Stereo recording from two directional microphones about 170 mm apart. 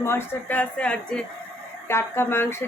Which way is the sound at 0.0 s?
15° left (ahead or behind).